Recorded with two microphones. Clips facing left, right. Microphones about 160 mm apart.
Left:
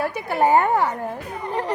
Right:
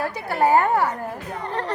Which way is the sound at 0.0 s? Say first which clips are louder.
Left 1 dB; 15° left (ahead or behind).